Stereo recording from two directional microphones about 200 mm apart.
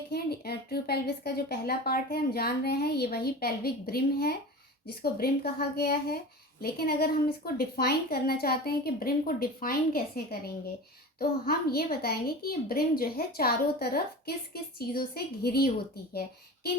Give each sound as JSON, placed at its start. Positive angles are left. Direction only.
{"t": 0.1, "sound": "a woman's voice", "side_deg": 50}
{"t": 11.2, "sound": "a woman's voice", "side_deg": 50}